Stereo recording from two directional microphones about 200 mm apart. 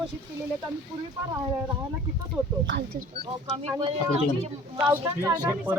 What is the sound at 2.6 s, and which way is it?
Speech, 60° right (ahead or behind).